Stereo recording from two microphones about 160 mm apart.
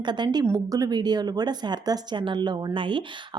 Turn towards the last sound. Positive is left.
turn(degrees=-30)  # may be behind; listen again after turning